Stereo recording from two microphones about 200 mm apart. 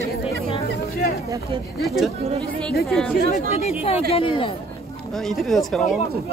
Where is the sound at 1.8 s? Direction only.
Centre (ahead or behind).